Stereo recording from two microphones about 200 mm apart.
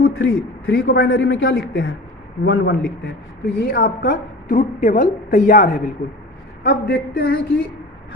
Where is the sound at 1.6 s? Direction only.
55° left (ahead or behind).